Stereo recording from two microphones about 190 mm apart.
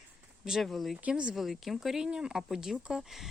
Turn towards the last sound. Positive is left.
turn(degrees=0)  # may be behind; listen again after turning